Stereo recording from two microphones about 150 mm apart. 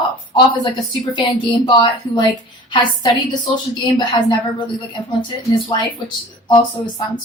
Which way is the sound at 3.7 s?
30° left (ahead or behind).